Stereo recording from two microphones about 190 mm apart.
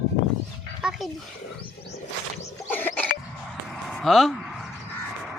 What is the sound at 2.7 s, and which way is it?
Cough, 10° left (ahead or behind).